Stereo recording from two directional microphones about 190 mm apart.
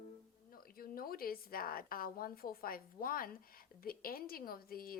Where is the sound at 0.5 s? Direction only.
50° left (ahead or behind).